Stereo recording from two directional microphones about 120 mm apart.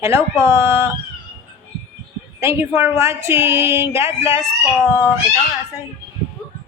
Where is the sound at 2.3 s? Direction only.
20° right (ahead or behind).